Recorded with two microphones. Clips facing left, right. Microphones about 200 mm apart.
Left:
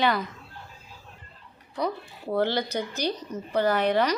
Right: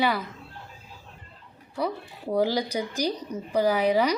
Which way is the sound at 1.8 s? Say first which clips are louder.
Even; 5° right (ahead or behind).